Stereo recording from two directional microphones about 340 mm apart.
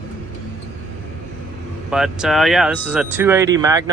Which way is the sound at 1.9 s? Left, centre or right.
Centre.